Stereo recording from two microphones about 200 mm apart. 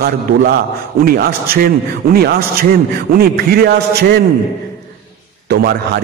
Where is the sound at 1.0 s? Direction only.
50° right (ahead or behind).